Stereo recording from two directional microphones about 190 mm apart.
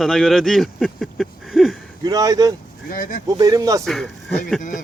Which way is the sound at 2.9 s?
45° left (ahead or behind).